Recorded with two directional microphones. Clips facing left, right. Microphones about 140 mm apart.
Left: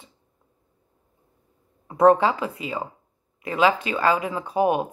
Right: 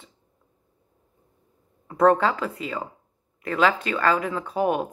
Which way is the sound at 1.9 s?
20° left (ahead or behind).